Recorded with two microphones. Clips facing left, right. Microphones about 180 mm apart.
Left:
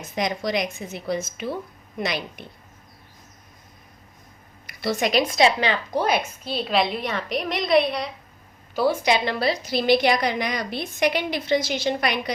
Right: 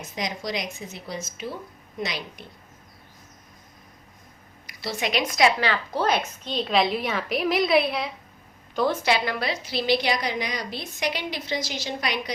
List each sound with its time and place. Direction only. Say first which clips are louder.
0.2 s a woman's voice: left 6 dB; 55° left (ahead or behind)
4.6 s a woman's voice: left 5 dB; 50° left (ahead or behind)
5.2 s a woman's voice: right 2 dB; 25° left (ahead or behind); by 8.1 s centre (ahead or behind)
8.7 s a woman's voice: left 2 dB; 10° left (ahead or behind); by 12.3 s 55° left (ahead or behind)